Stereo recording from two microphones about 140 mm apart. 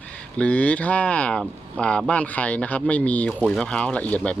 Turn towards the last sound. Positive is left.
turn(degrees=10)  # may be behind; listen again after turning